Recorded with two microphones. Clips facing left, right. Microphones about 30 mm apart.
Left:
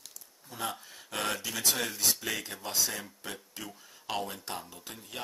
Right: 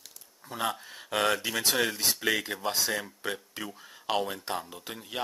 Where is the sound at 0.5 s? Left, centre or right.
Right.